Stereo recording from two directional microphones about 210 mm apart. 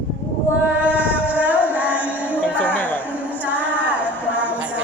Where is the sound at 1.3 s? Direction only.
5° right (ahead or behind).